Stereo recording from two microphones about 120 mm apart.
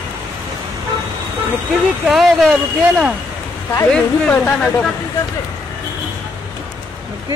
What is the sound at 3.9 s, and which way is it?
Speech, 10° left (ahead or behind).